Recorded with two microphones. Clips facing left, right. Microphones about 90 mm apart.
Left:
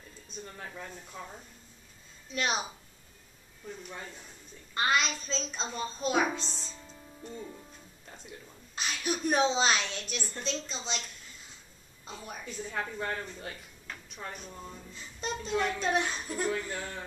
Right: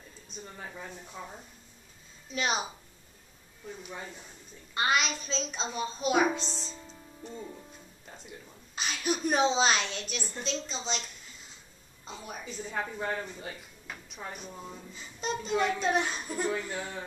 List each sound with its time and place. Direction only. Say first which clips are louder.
0.4 s speech: even; 5° right (ahead or behind)
3.8 s speech: right 1 dB; 5° right (ahead or behind)
12.1 s speech: right 1 dB; centre (ahead or behind)